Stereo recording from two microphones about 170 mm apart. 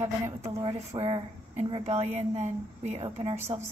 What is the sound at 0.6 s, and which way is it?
Speech, 35° right (ahead or behind).